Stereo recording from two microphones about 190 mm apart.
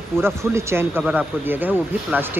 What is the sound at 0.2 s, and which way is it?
Speech, 15° right (ahead or behind).